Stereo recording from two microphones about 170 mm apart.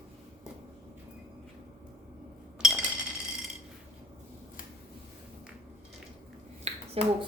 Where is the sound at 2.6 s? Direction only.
5° right (ahead or behind).